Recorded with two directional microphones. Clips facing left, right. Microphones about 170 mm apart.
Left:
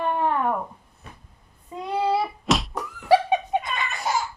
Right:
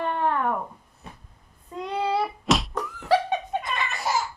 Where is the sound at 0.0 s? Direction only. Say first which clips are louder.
Left 2 dB; 10° left (ahead or behind).